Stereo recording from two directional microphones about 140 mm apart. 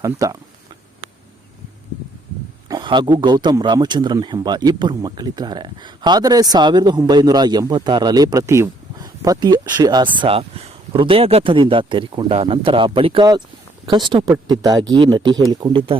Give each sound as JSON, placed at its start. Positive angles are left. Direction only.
{"t": 0.0, "sound": "speech", "side_deg": -25}
{"t": 2.6, "sound": "speech", "side_deg": -30}